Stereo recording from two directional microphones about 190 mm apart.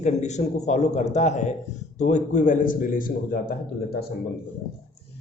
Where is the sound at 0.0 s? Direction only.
40° left (ahead or behind).